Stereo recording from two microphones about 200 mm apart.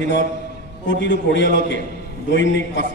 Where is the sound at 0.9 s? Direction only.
60° left (ahead or behind).